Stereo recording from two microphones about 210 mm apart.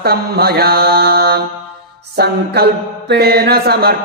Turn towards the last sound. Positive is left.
turn(degrees=-50)  # may be behind; listen again after turning